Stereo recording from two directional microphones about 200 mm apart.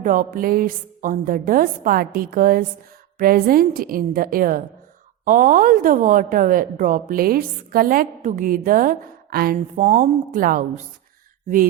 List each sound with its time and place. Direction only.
0.0 s a woman's voice: 40° right (ahead or behind)
9.6 s a woman's voice: 35° right (ahead or behind)